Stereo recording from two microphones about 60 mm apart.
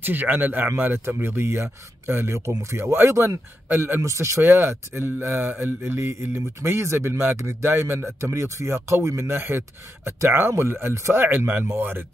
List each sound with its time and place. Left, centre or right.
0.0 s speech: right
3.6 s a man's voice: right
4.0 s speech: right
4.4 s speech: right
9.3 s speech: right
11.2 s speech: right